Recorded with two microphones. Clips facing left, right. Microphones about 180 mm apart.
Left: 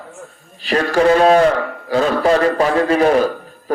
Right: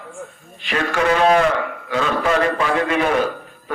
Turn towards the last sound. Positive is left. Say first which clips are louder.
# left 6 dB
turn(degrees=35)  # may be behind; listen again after turning